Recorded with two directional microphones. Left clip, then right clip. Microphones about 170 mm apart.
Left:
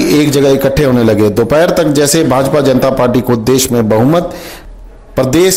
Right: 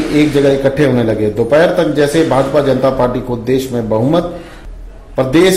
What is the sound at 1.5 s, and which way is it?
A man's voice, 40° left (ahead or behind).